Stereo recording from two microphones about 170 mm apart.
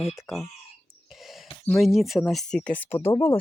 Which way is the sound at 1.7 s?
Centre (ahead or behind).